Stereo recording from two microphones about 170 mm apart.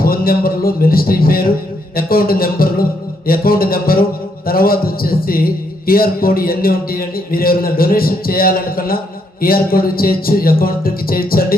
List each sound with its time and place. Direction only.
0.0 s a man's voice: 60° left (ahead or behind)